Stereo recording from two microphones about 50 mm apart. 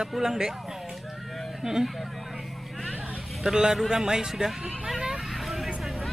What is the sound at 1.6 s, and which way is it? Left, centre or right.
Speech, centre.